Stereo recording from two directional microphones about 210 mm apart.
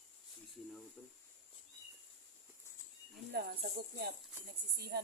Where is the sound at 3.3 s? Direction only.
45° right (ahead or behind).